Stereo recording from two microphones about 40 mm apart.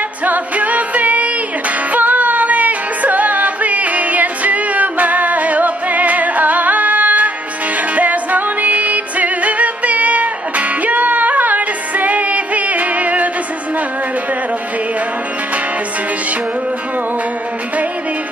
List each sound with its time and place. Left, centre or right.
0.2 s music: right